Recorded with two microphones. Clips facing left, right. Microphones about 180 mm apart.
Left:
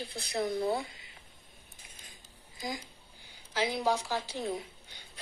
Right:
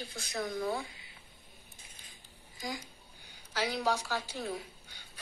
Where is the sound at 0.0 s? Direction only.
35° left (ahead or behind).